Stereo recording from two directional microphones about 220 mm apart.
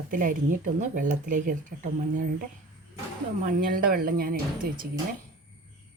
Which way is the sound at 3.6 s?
40° right (ahead or behind).